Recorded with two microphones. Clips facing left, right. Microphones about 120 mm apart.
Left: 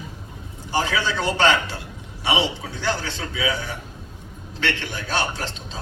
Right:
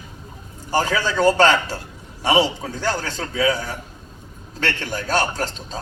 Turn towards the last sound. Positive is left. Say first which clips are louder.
# right 4 dB
turn(degrees=-40)  # may be behind; listen again after turning